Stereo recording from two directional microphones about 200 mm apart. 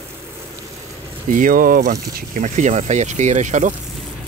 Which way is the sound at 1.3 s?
40° right (ahead or behind).